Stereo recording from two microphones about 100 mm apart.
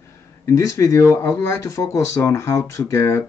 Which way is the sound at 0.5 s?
35° left (ahead or behind).